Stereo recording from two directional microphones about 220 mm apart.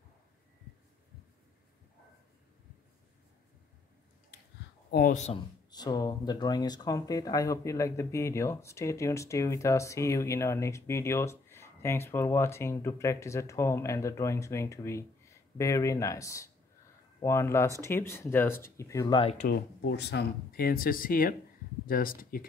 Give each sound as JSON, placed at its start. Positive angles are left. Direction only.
{"t": 4.9, "sound": "speech", "side_deg": 35}
{"t": 5.7, "sound": "speech", "side_deg": 20}
{"t": 19.4, "sound": "speech", "side_deg": 50}